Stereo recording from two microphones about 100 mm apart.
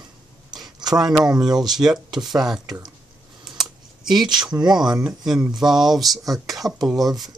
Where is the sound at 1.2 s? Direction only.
45° right (ahead or behind).